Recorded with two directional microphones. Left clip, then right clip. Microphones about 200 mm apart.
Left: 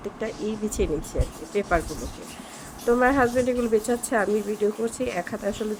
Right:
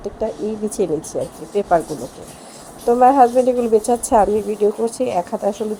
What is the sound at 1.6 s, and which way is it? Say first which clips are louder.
Speech: right 8 dB; 10° right (ahead or behind).